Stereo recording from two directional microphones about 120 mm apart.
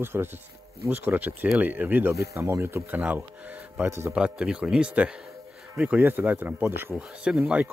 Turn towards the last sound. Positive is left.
turn(degrees=-10)  # may be behind; listen again after turning